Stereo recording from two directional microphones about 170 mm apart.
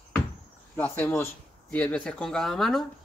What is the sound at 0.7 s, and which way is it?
Speech, 10° left (ahead or behind).